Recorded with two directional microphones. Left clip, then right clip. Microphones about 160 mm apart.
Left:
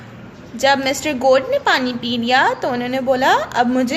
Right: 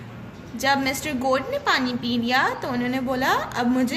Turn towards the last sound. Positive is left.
turn(degrees=45)  # may be behind; listen again after turning